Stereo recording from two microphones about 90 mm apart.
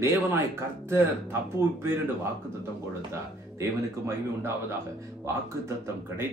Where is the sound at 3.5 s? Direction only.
30° right (ahead or behind).